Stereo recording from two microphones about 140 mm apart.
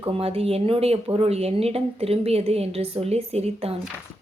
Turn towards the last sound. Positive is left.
turn(degrees=-45)  # may be behind; listen again after turning